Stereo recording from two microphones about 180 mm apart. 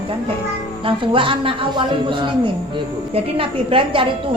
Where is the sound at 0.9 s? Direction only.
30° right (ahead or behind).